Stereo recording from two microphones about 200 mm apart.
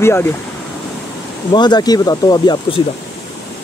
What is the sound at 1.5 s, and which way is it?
Speech, 20° left (ahead or behind).